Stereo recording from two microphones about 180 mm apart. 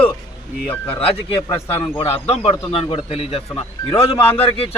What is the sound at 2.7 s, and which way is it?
A man's voice, 30° left (ahead or behind).